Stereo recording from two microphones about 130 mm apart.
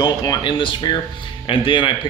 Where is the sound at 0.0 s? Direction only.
30° left (ahead or behind).